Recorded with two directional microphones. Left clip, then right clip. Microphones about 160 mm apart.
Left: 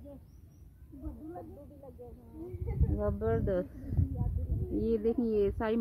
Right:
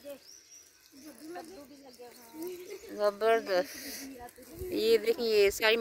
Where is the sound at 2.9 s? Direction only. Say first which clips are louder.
Right 6 dB; 40° right (ahead or behind).